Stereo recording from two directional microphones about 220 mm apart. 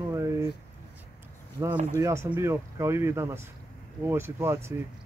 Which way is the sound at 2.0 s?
10° right (ahead or behind).